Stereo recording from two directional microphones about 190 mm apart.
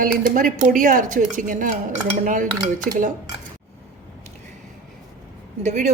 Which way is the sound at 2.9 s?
45° right (ahead or behind).